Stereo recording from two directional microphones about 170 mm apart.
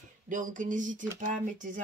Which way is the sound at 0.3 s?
50° right (ahead or behind).